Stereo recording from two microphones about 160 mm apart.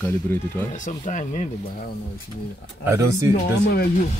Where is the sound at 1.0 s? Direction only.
50° left (ahead or behind).